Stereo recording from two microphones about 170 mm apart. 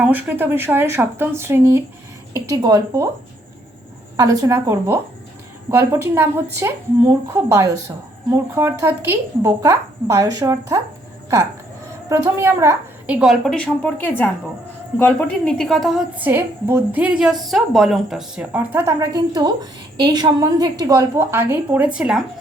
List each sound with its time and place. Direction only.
0.0 s a woman's voice: 10° right (ahead or behind)
4.2 s a woman's voice: 20° right (ahead or behind)
11.9 s a woman's voice: 15° right (ahead or behind)